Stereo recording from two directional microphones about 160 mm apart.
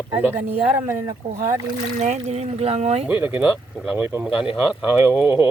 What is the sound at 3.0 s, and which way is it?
Speech, 10° right (ahead or behind).